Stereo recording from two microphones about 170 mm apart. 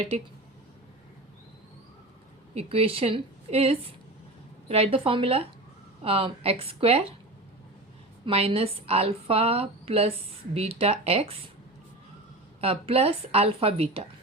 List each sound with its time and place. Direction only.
2.6 s a woman's voice: 35° right (ahead or behind)
8.2 s a woman's voice: 35° right (ahead or behind)
12.5 s a woman's voice: 35° right (ahead or behind)